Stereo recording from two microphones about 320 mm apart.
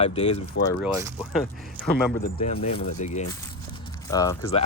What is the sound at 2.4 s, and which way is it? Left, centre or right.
Speech, centre.